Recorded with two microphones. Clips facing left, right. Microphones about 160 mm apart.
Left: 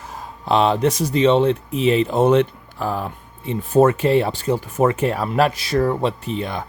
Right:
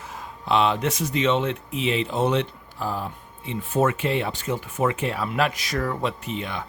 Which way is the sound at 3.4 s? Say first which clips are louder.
Left 7 dB; 40° left (ahead or behind).